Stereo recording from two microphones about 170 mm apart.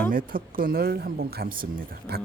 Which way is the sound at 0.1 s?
55° right (ahead or behind).